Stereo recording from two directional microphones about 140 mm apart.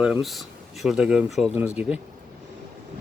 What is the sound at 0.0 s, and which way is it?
Speech, centre (ahead or behind).